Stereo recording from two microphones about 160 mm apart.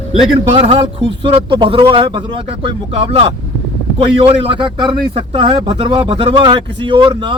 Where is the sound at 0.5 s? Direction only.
35° right (ahead or behind).